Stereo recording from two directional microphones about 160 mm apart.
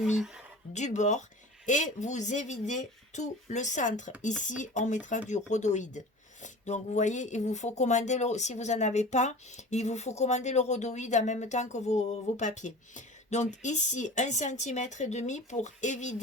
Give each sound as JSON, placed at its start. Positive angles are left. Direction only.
{"t": 0.7, "sound": "speech", "side_deg": 45}